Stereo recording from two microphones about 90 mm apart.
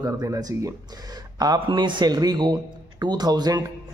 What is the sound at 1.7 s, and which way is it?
Speech, 60° right (ahead or behind).